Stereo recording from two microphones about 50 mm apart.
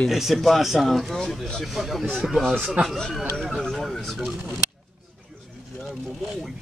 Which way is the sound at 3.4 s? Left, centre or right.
Centre.